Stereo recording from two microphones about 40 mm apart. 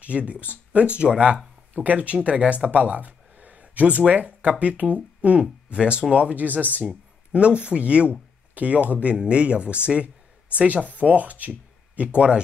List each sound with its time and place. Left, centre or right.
0.0 s speech: right
1.7 s speech: right
5.4 s speech: right
6.3 s speech: right
7.3 s speech: right
12.0 s speech: right